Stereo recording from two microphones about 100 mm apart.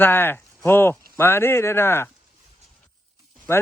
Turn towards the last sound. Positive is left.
turn(degrees=25)  # may be behind; listen again after turning